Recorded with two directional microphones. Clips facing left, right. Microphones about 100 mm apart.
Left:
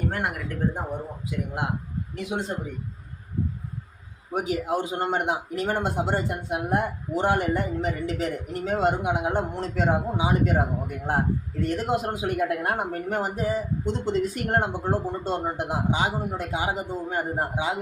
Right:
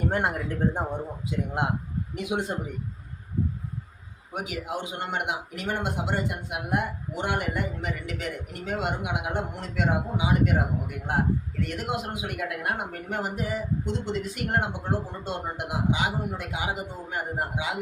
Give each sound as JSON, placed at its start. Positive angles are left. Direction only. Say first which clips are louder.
{"t": 0.1, "sound": "speech", "louder": "right 2 dB", "side_deg": -25}
{"t": 2.3, "sound": "speech", "louder": "right 1 dB", "side_deg": -10}
{"t": 4.3, "sound": "speech", "louder": "left 7 dB", "side_deg": 40}